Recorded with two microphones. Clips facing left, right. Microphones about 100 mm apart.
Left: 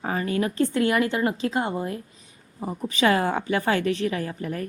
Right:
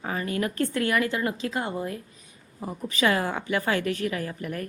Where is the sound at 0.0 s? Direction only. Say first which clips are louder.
Left 3 dB; 30° left (ahead or behind).